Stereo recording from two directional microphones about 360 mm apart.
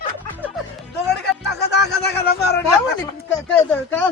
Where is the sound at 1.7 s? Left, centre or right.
Left.